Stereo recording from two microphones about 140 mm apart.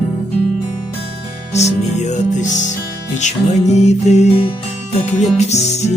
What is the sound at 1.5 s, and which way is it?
Music, 55° left (ahead or behind).